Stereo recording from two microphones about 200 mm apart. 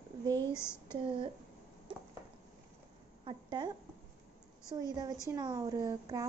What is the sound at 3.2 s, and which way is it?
Speech, 25° right (ahead or behind).